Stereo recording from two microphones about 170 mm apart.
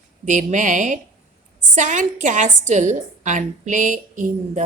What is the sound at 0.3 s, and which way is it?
A woman's voice, 45° right (ahead or behind).